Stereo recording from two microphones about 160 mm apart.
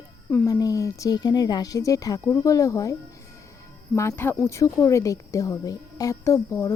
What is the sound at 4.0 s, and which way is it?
Speech, 15° left (ahead or behind).